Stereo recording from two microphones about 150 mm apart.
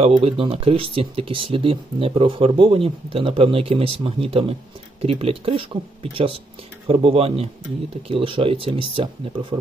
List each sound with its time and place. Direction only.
0.1 s speech: 35° right (ahead or behind)